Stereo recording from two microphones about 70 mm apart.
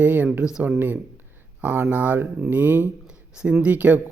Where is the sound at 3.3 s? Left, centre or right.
Centre.